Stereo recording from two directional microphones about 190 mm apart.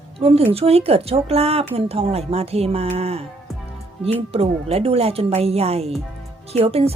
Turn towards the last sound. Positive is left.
turn(degrees=-30)  # may be behind; listen again after turning